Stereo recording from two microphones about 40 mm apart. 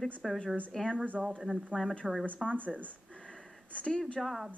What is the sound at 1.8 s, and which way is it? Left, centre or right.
Speech, centre.